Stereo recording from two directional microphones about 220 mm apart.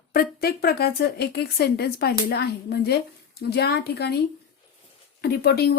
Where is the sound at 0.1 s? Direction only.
45° left (ahead or behind).